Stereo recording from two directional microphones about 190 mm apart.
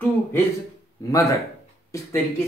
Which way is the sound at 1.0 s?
20° left (ahead or behind).